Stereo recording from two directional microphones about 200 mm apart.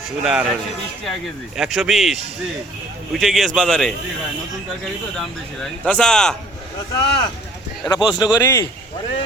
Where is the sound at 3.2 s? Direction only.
Centre (ahead or behind).